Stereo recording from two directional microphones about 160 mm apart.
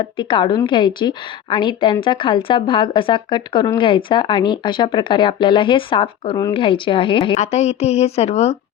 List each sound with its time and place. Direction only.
0.0 s a woman's voice: 30° left (ahead or behind)
7.3 s a woman's voice: 45° left (ahead or behind)